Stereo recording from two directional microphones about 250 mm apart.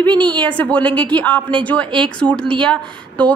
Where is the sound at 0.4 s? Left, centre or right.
Centre.